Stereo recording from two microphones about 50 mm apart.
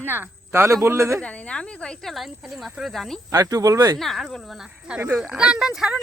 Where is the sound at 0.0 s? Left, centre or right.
Right.